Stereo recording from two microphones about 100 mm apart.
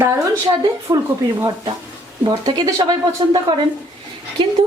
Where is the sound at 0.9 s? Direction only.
45° right (ahead or behind).